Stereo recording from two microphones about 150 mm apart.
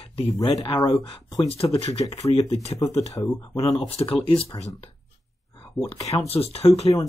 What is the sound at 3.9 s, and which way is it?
Speech, 40° left (ahead or behind).